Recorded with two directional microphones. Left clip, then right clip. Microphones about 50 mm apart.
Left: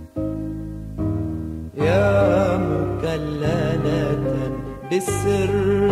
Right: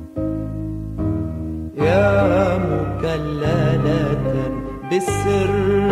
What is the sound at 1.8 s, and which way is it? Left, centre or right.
Music, left.